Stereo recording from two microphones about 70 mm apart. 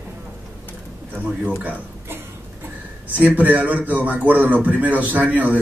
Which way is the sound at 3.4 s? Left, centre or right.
Right.